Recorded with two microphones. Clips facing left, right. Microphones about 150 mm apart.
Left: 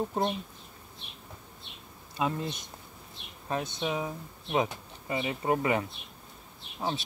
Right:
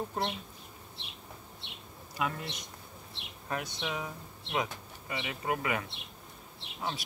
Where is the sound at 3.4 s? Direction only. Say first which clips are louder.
Left 5 dB; 25° left (ahead or behind).